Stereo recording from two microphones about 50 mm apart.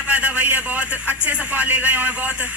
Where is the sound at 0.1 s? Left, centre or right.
Right.